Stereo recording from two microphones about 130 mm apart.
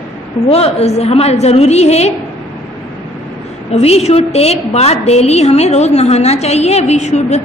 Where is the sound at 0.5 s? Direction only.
50° left (ahead or behind).